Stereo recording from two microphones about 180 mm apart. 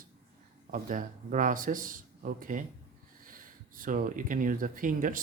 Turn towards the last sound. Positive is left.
turn(degrees=-50)  # may be behind; listen again after turning